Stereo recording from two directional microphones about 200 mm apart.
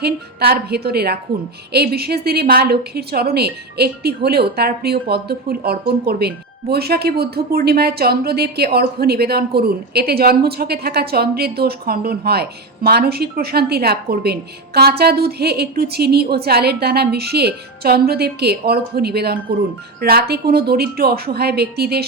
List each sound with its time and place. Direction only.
0.0 s speech: 50° right (ahead or behind)